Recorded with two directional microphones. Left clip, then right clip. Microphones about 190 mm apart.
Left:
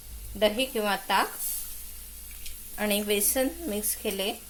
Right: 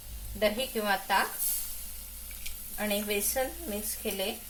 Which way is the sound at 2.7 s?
50° left (ahead or behind).